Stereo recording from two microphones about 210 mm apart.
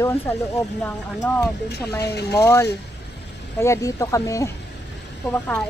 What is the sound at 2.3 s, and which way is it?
Speech, 15° left (ahead or behind).